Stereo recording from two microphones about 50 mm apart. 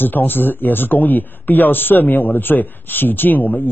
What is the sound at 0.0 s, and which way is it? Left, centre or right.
A man's voice, left.